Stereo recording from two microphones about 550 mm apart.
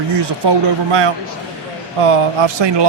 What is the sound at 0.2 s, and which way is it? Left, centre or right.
Speech, right.